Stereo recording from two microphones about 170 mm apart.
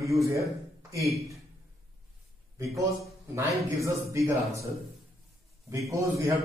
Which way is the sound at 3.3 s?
20° right (ahead or behind).